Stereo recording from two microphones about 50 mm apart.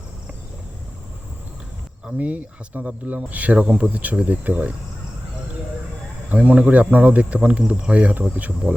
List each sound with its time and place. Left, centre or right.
2.0 s speech: right
6.3 s speech: right